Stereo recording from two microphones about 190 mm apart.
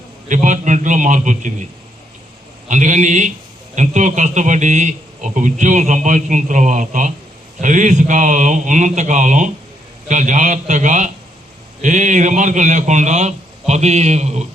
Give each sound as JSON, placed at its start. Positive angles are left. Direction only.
{"t": 0.3, "sound": "speech", "side_deg": -40}
{"t": 2.6, "sound": "speech", "side_deg": -40}